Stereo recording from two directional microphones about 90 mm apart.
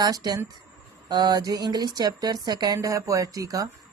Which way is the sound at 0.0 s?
45° right (ahead or behind).